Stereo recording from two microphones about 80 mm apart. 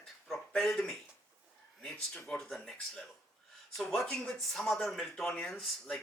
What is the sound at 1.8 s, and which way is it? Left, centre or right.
Speech, centre.